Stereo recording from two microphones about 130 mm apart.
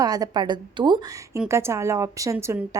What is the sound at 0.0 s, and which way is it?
A woman's voice, 30° right (ahead or behind).